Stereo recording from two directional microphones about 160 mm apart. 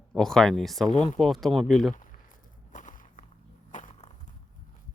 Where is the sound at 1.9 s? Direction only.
55° left (ahead or behind).